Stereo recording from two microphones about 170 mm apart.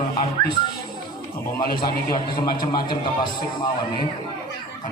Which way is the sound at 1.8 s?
25° left (ahead or behind).